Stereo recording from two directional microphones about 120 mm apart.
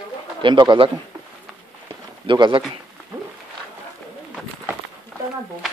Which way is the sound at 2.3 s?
40° right (ahead or behind).